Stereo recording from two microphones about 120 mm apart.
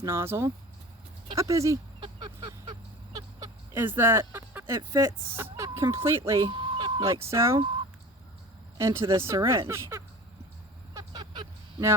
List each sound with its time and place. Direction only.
0.0 s speech: 20° right (ahead or behind)
2.0 s a sound: 40° right (ahead or behind)
3.7 s speech: 20° right (ahead or behind)
6.4 s a sound: 40° right (ahead or behind)
7.0 s speech: 25° right (ahead or behind)
8.8 s speech: 20° right (ahead or behind)
11.1 s vehicle: 40° right (ahead or behind)